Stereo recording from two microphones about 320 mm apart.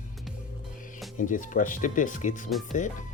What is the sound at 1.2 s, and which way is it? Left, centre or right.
Speech, left.